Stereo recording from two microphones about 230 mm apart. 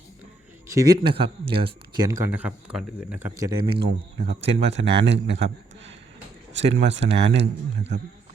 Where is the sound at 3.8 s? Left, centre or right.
Right.